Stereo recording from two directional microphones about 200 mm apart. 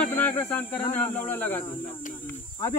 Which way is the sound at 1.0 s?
10° left (ahead or behind).